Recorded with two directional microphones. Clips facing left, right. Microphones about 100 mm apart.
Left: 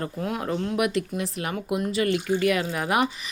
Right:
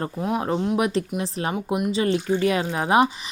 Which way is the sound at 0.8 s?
30° right (ahead or behind).